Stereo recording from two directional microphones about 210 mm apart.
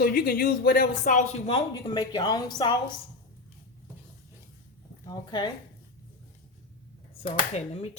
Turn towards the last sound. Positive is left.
turn(degrees=30)  # may be behind; listen again after turning